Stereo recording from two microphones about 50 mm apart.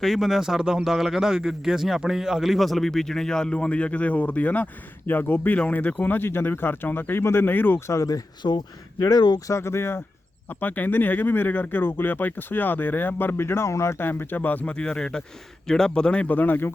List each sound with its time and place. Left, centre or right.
0.0 s speech: centre
0.6 s speech: centre
0.9 s a man's voice: centre; by 7.5 s left
7.5 s speech: left
9.5 s speech: left
10.5 s speech: left
14.0 s speech: left
14.7 s a man's voice: centre
16.2 s speech: left